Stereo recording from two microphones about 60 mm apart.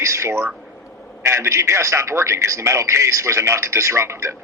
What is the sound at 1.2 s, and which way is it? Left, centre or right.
A man's voice, right.